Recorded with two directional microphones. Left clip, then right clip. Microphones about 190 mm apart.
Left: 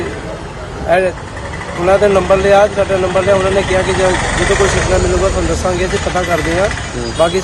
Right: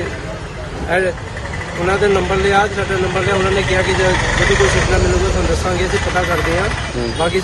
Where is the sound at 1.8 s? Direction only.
30° left (ahead or behind).